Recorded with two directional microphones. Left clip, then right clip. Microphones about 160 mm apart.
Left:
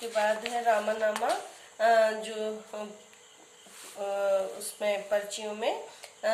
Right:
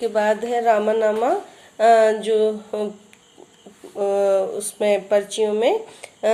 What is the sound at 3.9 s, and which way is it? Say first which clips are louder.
Speech: right 10 dB; 30° right (ahead or behind).